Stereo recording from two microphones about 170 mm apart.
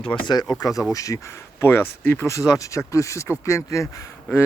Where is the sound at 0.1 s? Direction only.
25° left (ahead or behind).